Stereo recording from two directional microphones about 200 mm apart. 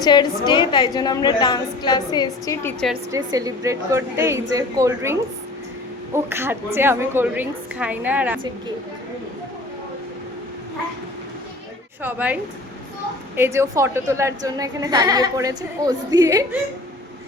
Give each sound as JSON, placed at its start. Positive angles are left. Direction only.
{"t": 0.0, "sound": "a woman's voice", "side_deg": 20}
{"t": 3.1, "sound": "a woman's voice", "side_deg": -20}
{"t": 6.1, "sound": "a woman's voice", "side_deg": -10}
{"t": 12.0, "sound": "a woman's voice", "side_deg": -5}